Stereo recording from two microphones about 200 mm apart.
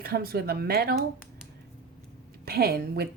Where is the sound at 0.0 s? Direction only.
50° right (ahead or behind).